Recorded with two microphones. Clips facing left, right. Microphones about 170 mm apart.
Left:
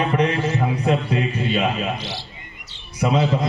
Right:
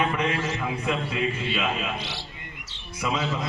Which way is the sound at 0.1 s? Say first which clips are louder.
Left 6 dB; 35° left (ahead or behind).